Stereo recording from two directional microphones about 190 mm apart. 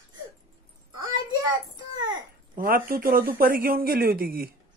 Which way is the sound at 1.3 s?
25° right (ahead or behind).